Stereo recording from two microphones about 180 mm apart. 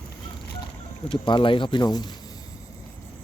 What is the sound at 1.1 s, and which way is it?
Speech, 25° left (ahead or behind).